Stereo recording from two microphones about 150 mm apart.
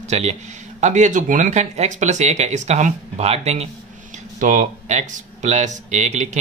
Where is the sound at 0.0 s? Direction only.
50° right (ahead or behind).